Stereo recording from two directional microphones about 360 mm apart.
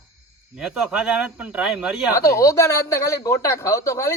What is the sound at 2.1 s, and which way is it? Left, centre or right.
Speech, centre.